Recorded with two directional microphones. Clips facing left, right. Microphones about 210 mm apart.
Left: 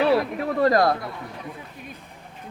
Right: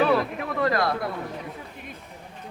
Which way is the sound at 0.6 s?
40° left (ahead or behind).